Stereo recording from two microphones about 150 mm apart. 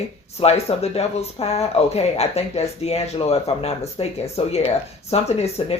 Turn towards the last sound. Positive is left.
turn(degrees=45)  # may be behind; listen again after turning